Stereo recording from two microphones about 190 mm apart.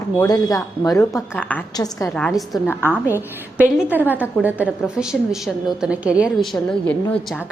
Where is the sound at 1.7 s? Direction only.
20° left (ahead or behind).